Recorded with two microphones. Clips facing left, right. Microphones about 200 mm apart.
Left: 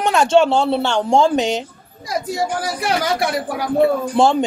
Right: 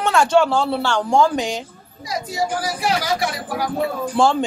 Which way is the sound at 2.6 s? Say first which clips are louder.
Left 2 dB; 55° left (ahead or behind).